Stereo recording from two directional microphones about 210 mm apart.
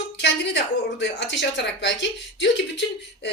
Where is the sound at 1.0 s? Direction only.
55° left (ahead or behind).